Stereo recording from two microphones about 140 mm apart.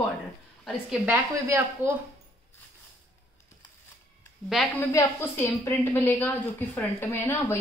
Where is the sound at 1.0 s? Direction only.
15° right (ahead or behind).